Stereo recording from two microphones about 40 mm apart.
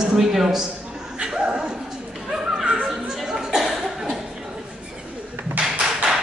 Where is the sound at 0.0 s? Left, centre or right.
Centre.